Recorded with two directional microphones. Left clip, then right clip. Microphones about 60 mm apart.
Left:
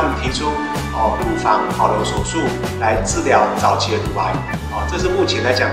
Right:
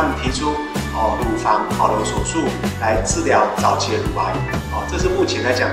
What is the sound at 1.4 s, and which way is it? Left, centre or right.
Speech, centre.